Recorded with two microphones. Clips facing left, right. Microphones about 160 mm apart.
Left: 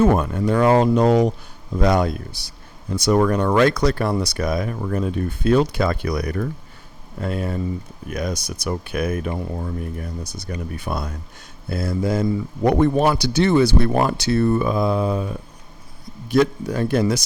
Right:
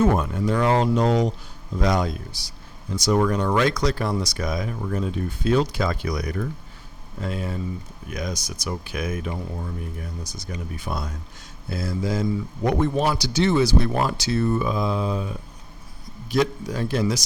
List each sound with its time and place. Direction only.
0.0 s a man's voice: 55° left (ahead or behind)